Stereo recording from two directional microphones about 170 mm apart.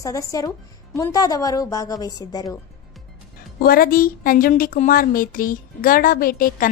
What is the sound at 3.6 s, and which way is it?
A woman's voice, 60° left (ahead or behind).